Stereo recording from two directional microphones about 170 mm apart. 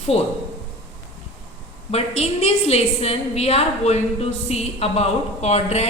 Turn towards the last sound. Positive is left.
turn(degrees=40)  # may be behind; listen again after turning